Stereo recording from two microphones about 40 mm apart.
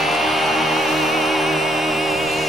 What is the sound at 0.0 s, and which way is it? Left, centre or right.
Music, centre.